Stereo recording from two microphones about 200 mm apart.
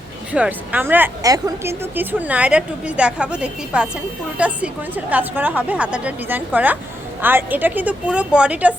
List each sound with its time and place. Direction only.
0.3 s speech: 5° right (ahead or behind)